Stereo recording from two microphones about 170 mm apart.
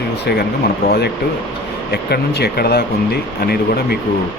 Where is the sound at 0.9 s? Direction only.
70° left (ahead or behind).